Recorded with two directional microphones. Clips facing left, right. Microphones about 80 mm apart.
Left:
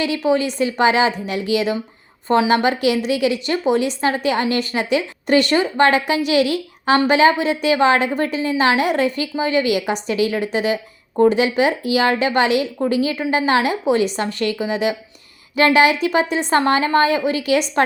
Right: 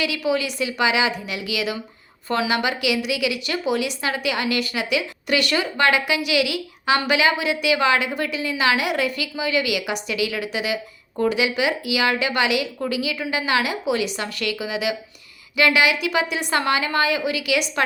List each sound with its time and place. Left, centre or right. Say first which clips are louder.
0.0 s a woman's voice: left 5 dB; left